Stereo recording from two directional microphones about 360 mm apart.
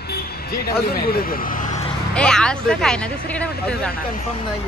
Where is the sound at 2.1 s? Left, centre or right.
Centre.